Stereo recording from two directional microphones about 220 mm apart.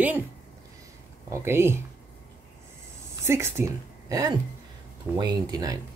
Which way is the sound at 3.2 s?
10° right (ahead or behind).